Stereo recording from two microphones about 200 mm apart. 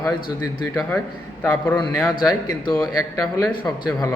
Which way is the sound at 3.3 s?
15° left (ahead or behind).